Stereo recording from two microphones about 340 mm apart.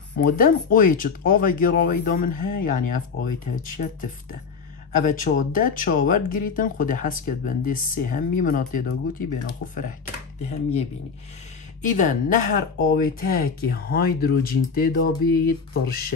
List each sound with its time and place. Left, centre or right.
0.2 s speech: left